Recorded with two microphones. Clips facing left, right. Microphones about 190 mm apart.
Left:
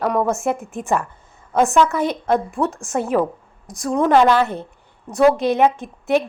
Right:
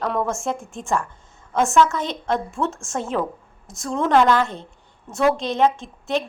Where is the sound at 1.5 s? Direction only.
15° left (ahead or behind); by 3.9 s centre (ahead or behind).